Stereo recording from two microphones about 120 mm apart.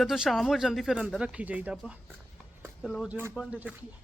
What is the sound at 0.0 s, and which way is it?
Speech, centre (ahead or behind).